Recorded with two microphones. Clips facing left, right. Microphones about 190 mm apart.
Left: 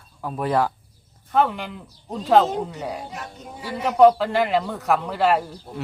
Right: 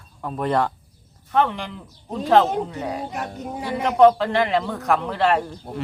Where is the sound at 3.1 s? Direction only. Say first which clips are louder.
Right 7 dB; 55° right (ahead or behind).